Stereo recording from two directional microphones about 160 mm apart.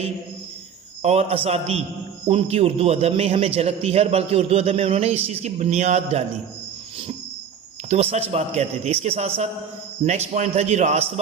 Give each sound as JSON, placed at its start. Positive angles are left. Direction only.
{"t": 1.0, "sound": "a man's voice", "side_deg": -40}
{"t": 7.9, "sound": "a man's voice", "side_deg": -40}